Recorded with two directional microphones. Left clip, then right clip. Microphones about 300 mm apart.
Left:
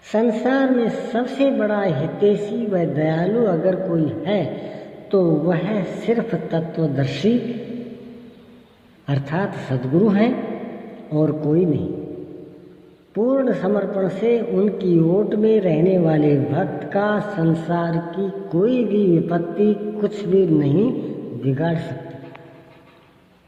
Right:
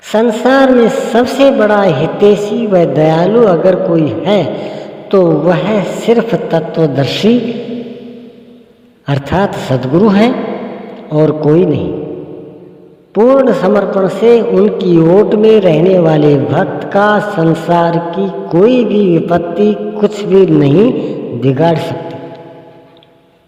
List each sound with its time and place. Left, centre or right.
0.1 s a man's voice: right
9.0 s a man's voice: right
13.1 s a man's voice: right